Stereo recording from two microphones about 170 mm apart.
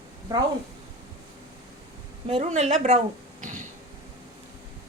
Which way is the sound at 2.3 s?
35° right (ahead or behind).